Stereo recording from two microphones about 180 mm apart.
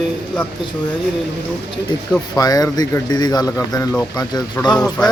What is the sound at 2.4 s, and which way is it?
Speech, 20° left (ahead or behind).